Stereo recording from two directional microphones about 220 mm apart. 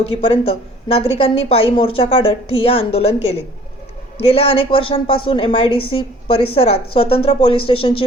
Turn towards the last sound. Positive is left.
turn(degrees=25)  # may be behind; listen again after turning